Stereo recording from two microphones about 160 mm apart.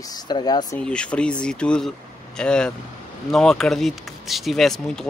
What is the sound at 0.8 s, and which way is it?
Speech, 5° left (ahead or behind).